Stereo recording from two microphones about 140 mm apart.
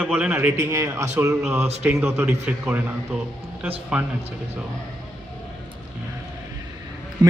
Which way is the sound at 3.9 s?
5° right (ahead or behind).